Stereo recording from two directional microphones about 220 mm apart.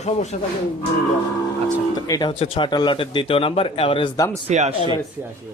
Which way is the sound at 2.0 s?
15° left (ahead or behind).